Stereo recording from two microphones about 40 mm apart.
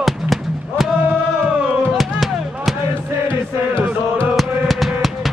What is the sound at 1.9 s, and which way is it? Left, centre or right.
Music, centre.